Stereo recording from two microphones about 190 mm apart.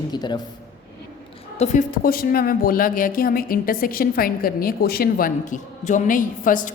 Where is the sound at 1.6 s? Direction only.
40° left (ahead or behind).